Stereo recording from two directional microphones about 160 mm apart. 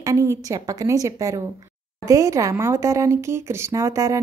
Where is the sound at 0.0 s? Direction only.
20° right (ahead or behind).